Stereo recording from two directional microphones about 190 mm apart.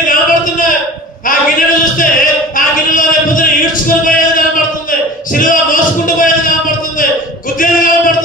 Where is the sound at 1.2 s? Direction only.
45° left (ahead or behind).